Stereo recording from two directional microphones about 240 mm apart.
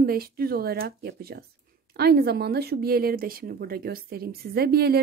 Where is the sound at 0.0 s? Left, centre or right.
Right.